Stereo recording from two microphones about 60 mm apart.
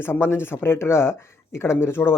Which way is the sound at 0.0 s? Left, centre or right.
Left.